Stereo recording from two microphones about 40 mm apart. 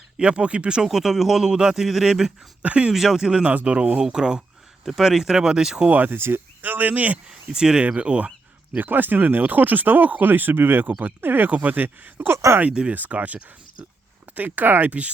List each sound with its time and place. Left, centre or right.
0.2 s speech: right
0.8 s a man's voice: centre
1.7 s a man's voice: centre
2.6 s speech: right
2.9 s a man's voice: centre
3.4 s a man's voice: right
4.0 s a man's voice: centre
6.1 s speech: right
6.6 s speech: right
7.3 s a man's voice: centre
8.8 s speech: right
11.5 s a man's voice: right
14.3 s speech: right